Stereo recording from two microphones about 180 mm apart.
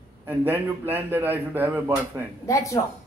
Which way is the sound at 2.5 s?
15° left (ahead or behind).